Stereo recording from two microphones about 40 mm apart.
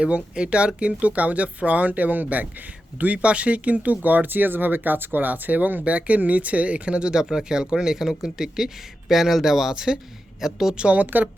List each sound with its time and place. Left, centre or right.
0.0 s speech: right
5.8 s speech: right; by 10.8 s centre
10.9 s speech: right